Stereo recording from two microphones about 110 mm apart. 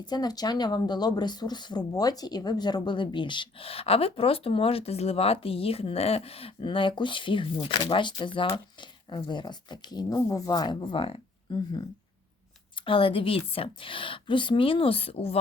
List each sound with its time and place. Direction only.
0.0 s speech: 40° left (ahead or behind); by 11.2 s 55° left (ahead or behind)
11.5 s speech: 40° left (ahead or behind)
12.8 s a woman's voice: 55° left (ahead or behind)